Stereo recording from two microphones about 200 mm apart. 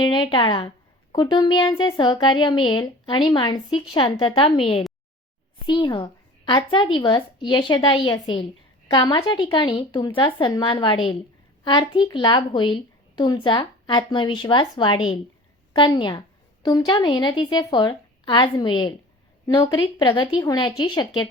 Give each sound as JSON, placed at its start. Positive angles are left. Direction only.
{"t": 0.0, "sound": "a woman's voice", "side_deg": 25}